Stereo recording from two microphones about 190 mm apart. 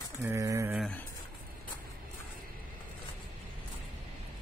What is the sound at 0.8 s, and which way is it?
Speech, 5° left (ahead or behind).